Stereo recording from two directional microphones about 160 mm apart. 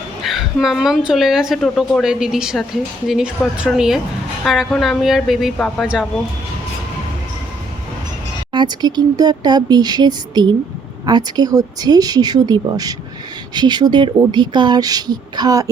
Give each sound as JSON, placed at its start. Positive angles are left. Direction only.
{"t": 0.2, "sound": "a woman's voice", "side_deg": 0}
{"t": 8.5, "sound": "speech", "side_deg": -25}